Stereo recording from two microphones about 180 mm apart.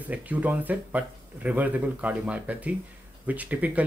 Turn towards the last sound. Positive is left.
turn(degrees=-10)  # may be behind; listen again after turning